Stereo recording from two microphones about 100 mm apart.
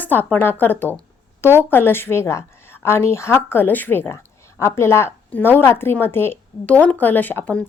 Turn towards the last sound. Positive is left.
turn(degrees=20)  # may be behind; listen again after turning